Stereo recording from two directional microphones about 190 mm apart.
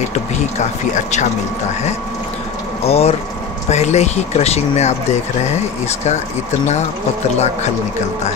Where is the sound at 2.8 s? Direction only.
30° left (ahead or behind).